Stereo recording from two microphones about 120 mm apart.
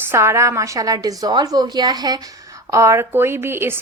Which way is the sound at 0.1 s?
20° right (ahead or behind).